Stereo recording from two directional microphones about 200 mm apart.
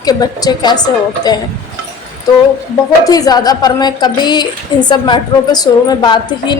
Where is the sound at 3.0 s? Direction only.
20° left (ahead or behind).